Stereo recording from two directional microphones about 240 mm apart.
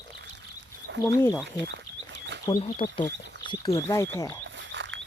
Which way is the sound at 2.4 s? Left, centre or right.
Left.